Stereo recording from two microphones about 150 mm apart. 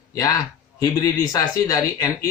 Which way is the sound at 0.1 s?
25° left (ahead or behind).